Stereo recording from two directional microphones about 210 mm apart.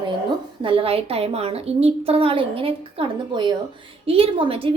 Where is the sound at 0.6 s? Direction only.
25° right (ahead or behind).